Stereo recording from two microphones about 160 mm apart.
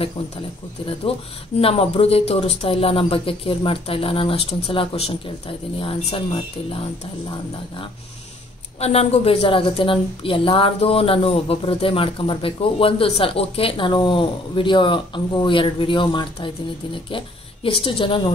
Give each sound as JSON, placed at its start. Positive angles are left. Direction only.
{"t": 1.6, "sound": "a woman's voice", "side_deg": 35}
{"t": 8.7, "sound": "a woman's voice", "side_deg": 40}